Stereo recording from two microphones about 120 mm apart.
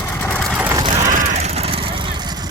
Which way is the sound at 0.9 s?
90° right.